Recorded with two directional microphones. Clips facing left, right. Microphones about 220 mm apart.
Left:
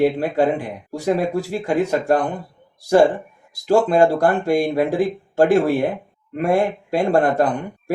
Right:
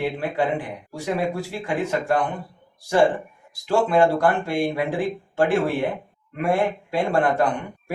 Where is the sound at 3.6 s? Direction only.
40° left (ahead or behind).